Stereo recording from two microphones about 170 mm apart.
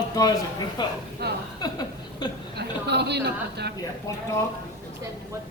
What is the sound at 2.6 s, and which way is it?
A woman's voice, 75° right (ahead or behind).